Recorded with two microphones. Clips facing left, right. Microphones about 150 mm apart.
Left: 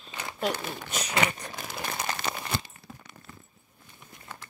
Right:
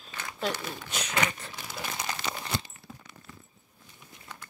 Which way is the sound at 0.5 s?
45° left (ahead or behind).